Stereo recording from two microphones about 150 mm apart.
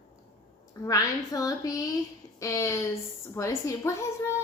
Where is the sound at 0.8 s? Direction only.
25° left (ahead or behind).